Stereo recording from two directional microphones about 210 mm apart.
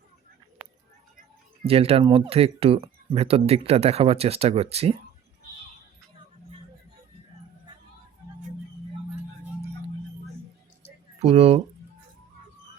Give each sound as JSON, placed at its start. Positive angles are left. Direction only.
{"t": 1.6, "sound": "speech", "side_deg": -30}
{"t": 11.2, "sound": "speech", "side_deg": -30}